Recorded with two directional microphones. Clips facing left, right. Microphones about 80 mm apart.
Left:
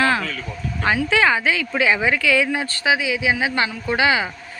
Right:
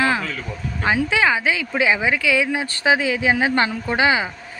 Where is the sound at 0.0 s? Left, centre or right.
Centre.